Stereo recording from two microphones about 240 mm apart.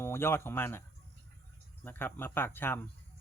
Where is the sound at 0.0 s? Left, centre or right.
Centre.